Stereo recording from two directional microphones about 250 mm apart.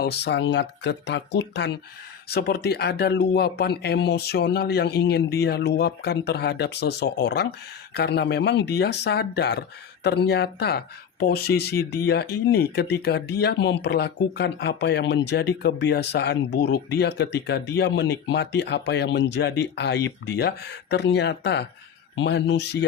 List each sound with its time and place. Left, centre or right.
0.0 s speech: left